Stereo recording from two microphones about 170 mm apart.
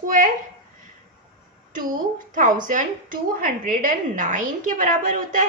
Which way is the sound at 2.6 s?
55° right (ahead or behind).